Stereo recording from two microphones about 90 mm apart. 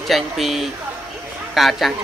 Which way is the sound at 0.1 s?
Centre (ahead or behind).